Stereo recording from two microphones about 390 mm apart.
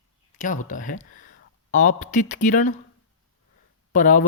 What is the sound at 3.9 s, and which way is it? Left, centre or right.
Speech, centre.